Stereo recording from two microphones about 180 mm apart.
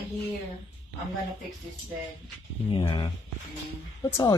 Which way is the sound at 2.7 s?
25° left (ahead or behind).